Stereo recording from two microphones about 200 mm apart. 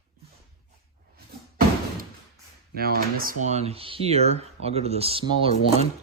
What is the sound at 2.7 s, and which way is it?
Speech, 50° right (ahead or behind).